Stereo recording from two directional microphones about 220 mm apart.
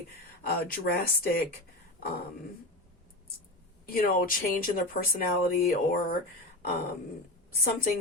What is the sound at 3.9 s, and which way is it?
Speech, 40° left (ahead or behind).